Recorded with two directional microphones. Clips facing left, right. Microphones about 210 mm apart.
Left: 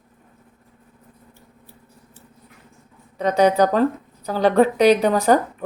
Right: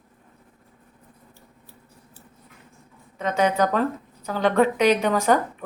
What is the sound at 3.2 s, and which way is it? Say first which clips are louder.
A woman's voice: left 5 dB; 35° left (ahead or behind).